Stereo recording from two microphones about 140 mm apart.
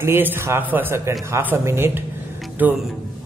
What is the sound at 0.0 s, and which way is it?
A man's voice, 15° right (ahead or behind).